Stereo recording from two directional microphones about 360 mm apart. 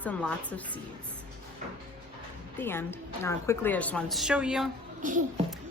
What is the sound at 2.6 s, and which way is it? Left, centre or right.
A woman's voice, centre.